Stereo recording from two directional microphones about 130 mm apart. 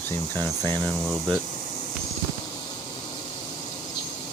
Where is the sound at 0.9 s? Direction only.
5° left (ahead or behind).